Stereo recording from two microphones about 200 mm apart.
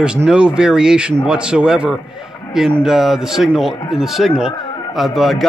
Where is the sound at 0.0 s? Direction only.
5° right (ahead or behind).